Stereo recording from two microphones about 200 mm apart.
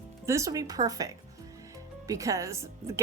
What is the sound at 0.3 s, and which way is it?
A woman's voice, 15° right (ahead or behind).